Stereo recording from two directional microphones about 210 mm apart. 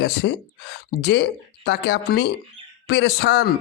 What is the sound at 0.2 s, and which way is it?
A man's voice, 60° left (ahead or behind).